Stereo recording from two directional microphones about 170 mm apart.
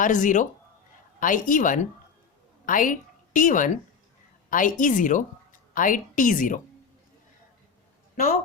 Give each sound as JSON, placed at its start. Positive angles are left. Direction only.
{"t": 0.0, "sound": "a woman's voice", "side_deg": 50}